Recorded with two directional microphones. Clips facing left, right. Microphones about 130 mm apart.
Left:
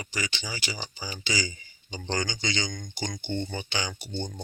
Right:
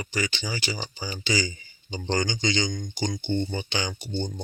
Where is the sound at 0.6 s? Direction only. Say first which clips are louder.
Right 4 dB; 35° right (ahead or behind).